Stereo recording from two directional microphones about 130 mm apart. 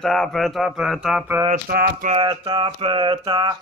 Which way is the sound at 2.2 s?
35° right (ahead or behind).